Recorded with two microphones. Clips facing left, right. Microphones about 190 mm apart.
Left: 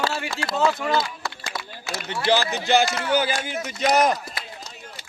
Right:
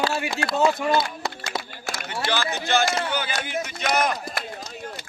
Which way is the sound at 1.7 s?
50° right (ahead or behind).